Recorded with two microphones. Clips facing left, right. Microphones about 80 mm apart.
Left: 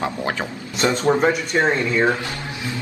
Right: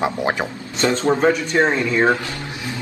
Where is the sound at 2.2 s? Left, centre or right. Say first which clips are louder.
Even; left.